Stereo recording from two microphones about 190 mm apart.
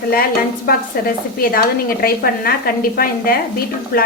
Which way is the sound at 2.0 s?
50° left (ahead or behind).